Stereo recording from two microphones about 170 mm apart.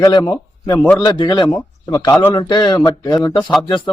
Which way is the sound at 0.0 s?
25° left (ahead or behind).